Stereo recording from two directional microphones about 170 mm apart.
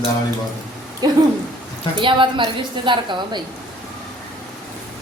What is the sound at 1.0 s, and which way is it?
A woman's voice, 25° right (ahead or behind).